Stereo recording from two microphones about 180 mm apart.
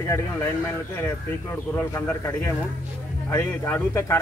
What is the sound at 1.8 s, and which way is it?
Speech, 10° left (ahead or behind).